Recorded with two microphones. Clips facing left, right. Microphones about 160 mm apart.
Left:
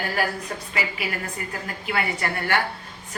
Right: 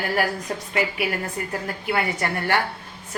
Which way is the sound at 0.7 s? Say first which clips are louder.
Right 6 dB; 60° right (ahead or behind).